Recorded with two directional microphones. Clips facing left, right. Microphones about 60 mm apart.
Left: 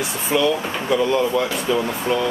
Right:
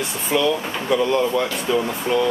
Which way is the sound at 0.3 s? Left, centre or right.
Centre.